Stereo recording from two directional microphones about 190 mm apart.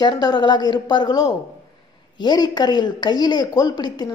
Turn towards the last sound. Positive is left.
turn(degrees=20)  # may be behind; listen again after turning